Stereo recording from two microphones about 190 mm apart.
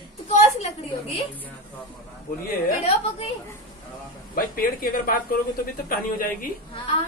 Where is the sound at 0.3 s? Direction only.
35° left (ahead or behind).